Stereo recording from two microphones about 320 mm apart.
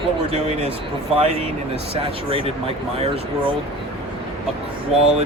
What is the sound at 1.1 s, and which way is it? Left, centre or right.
Speech, centre.